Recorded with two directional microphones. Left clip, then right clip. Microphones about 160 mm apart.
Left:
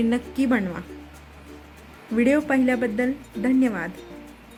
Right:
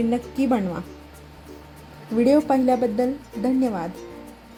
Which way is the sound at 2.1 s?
15° right (ahead or behind).